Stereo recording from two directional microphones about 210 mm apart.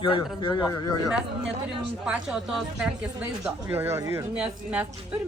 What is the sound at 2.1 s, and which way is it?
Speech, 5° right (ahead or behind).